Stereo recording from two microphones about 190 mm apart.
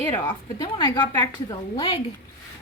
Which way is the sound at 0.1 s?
20° left (ahead or behind).